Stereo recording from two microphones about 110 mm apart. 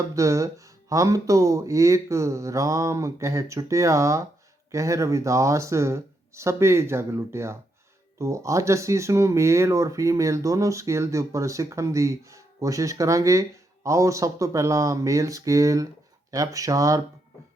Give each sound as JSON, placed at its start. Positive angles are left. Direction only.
{"t": 0.1, "sound": "speech", "side_deg": -30}